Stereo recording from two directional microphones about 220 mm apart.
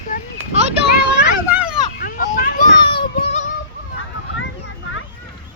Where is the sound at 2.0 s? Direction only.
40° left (ahead or behind).